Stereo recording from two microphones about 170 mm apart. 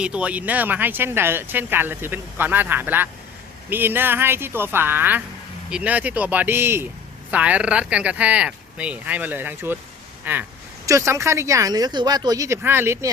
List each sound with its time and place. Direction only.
0.0 s speech: 5° right (ahead or behind)